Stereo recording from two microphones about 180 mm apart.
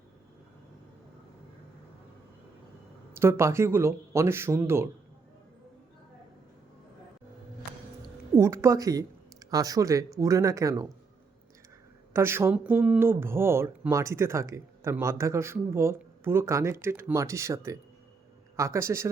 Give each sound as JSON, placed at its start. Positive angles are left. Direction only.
{"t": 3.2, "sound": "speech", "side_deg": -15}
{"t": 8.4, "sound": "speech", "side_deg": -15}
{"t": 12.1, "sound": "speech", "side_deg": -15}